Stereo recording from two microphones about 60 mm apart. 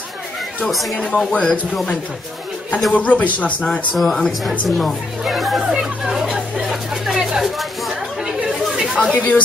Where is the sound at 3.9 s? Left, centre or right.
Centre.